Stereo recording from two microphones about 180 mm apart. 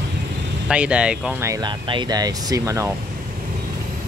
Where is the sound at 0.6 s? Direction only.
5° right (ahead or behind).